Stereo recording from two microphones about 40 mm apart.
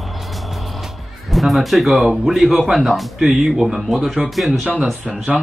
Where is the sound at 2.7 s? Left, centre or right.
Centre.